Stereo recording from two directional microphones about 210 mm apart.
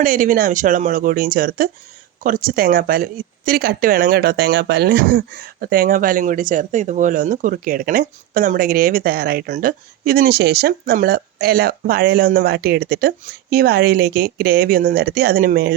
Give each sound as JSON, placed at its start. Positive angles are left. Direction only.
{"t": 0.0, "sound": "speech", "side_deg": -40}